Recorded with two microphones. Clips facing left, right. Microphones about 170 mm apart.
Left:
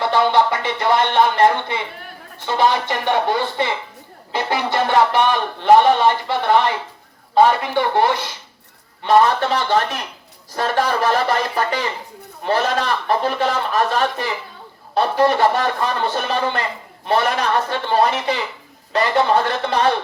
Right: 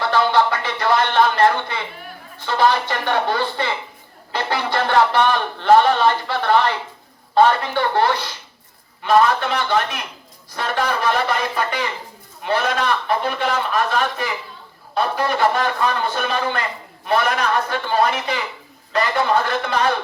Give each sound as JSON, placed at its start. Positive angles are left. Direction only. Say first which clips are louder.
{"t": 0.0, "sound": "speech", "louder": "left 1 dB", "side_deg": 20}
{"t": 9.0, "sound": "a man's voice", "louder": "left 1 dB", "side_deg": 30}